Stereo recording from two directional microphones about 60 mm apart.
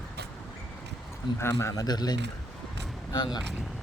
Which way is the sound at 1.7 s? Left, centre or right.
Left.